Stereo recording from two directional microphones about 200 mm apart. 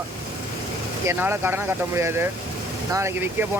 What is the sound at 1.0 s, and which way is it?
Speech, 10° right (ahead or behind).